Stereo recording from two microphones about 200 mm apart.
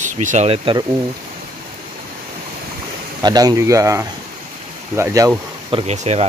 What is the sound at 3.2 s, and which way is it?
Speech, 20° right (ahead or behind).